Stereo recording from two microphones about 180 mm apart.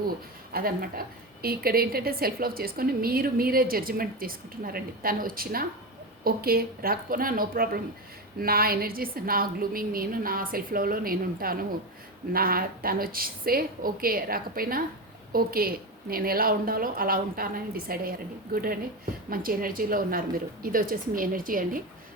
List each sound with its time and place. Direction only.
0.5 s a woman's voice: 55° right (ahead or behind)